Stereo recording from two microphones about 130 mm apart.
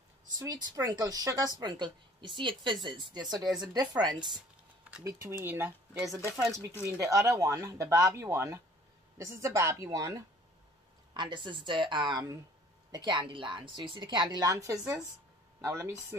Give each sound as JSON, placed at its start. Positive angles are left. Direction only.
{"t": 0.4, "sound": "speech", "side_deg": -30}
{"t": 5.0, "sound": "speech", "side_deg": -20}
{"t": 11.1, "sound": "speech", "side_deg": -40}